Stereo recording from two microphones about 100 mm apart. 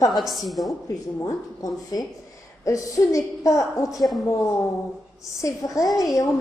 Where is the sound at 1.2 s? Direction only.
40° left (ahead or behind).